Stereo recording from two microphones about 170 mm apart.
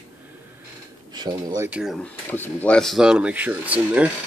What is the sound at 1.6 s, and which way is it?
Speech, 5° right (ahead or behind).